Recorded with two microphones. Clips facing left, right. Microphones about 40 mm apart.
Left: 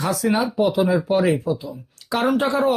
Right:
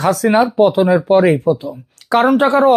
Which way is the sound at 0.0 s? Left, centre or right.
Right.